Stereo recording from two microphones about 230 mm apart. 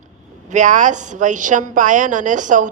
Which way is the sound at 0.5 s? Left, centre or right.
Right.